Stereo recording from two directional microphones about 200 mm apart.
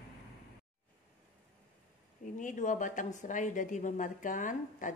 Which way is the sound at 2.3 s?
40° left (ahead or behind).